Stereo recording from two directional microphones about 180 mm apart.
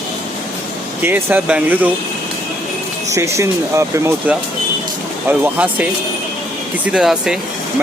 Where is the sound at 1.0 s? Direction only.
10° right (ahead or behind).